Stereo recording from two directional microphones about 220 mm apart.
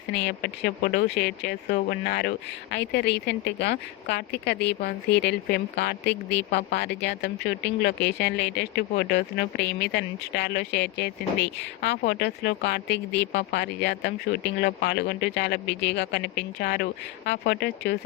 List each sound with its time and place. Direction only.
0.1 s a woman's voice: 50° left (ahead or behind)